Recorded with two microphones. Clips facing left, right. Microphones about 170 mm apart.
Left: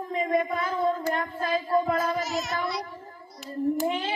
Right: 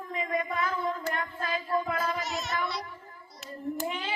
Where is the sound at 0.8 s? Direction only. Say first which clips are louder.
Left 6 dB; 35° left (ahead or behind).